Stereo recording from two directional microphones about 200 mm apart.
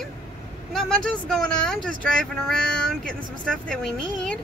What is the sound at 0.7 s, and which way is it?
Speech, 5° left (ahead or behind).